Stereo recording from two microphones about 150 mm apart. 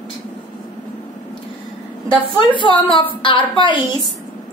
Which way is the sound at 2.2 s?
35° left (ahead or behind).